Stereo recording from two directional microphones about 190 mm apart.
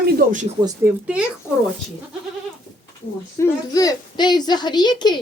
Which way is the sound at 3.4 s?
20° left (ahead or behind).